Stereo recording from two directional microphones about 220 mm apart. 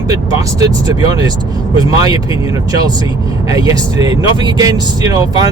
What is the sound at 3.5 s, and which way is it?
Speech, 15° right (ahead or behind).